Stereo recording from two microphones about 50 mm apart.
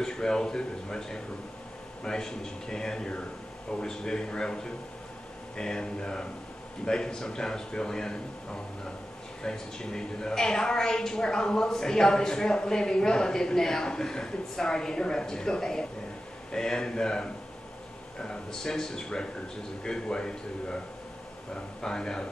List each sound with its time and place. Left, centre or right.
0.0 s a woman's voice: centre
5.6 s a woman's voice: centre
9.4 s a woman's voice: centre
21.8 s a woman's voice: centre